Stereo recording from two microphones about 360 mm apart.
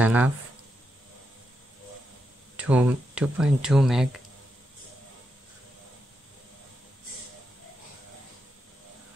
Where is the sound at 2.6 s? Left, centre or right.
Centre.